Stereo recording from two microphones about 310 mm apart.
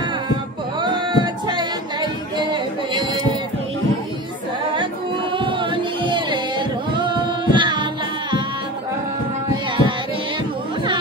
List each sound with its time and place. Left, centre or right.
0.7 s singing: centre
4.7 s music: centre
9.7 s child singing: centre